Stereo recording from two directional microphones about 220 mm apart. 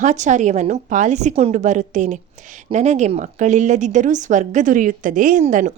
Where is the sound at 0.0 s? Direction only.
35° right (ahead or behind).